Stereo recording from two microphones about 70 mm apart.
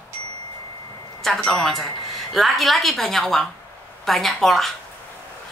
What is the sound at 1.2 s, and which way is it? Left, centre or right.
A woman's voice, centre.